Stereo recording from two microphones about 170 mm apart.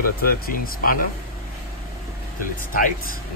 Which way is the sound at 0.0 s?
55° left (ahead or behind).